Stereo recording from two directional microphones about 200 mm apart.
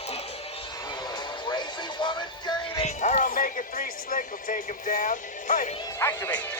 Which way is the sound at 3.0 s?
40° left (ahead or behind).